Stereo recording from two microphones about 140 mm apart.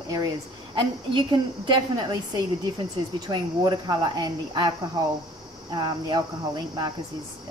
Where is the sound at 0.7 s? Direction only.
35° right (ahead or behind).